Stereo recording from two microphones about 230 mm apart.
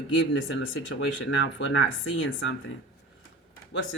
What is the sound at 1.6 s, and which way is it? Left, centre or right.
Speech, left.